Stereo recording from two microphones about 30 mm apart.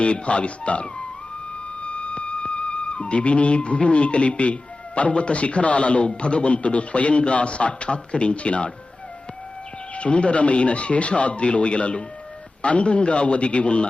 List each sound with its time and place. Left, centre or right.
0.0 s a man's voice: left
1.8 s music: left
4.9 s a man's voice: left
9.9 s a man's voice: left